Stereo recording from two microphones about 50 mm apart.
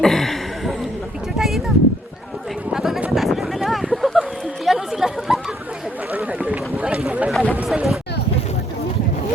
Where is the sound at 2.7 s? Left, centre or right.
Centre.